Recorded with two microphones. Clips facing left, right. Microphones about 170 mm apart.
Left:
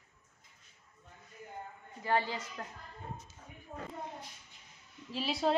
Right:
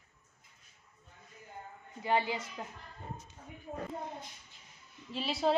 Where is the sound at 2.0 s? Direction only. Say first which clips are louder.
Right 1 dB; 15° right (ahead or behind).